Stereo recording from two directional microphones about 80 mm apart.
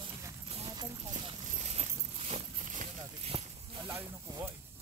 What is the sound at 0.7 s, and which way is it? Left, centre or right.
Clip-clop, right.